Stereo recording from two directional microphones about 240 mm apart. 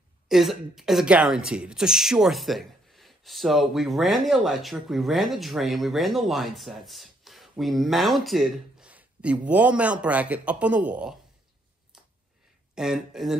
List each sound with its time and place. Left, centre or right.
0.3 s a woman's voice: centre
12.7 s a woman's voice: centre